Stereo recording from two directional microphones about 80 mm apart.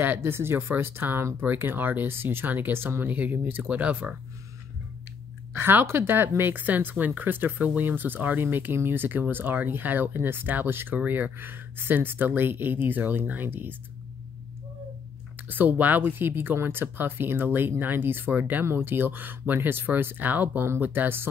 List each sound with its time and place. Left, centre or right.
0.0 s speech: right
5.5 s speech: right
15.4 s speech: right